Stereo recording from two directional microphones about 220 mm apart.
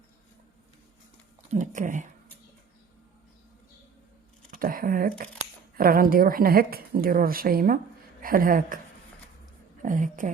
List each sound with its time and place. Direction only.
1.5 s a woman's voice: 35° right (ahead or behind)
4.5 s a woman's voice: 40° right (ahead or behind)
9.8 s a woman's voice: 35° right (ahead or behind)